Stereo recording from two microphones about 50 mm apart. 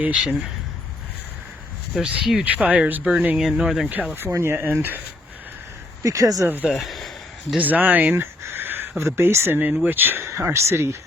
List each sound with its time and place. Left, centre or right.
0.0 s speech: right
1.9 s speech: centre
2.4 s speech: right
3.3 s speech: centre
4.1 s speech: right
4.6 s speech: right
6.0 s speech: right
6.7 s speech: centre
7.6 s speech: right
8.1 s a sound: right
9.0 s speech: right
9.6 s speech: right
10.2 s speech: right